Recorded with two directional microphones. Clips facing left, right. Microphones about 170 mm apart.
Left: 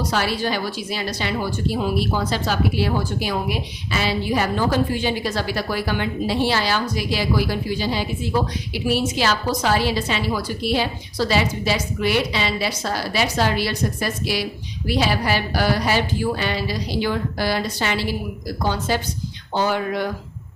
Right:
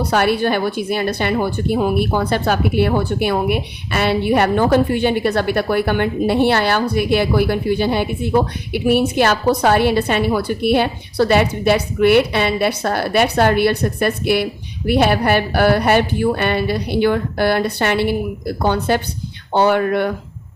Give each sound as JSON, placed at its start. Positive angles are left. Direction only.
{"t": 0.0, "sound": "a woman's voice", "side_deg": -60}